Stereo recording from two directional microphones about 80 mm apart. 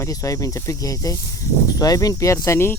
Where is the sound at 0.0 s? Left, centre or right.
Left.